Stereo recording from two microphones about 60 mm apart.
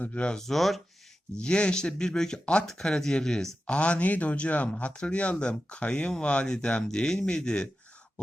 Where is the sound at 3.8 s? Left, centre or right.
Left.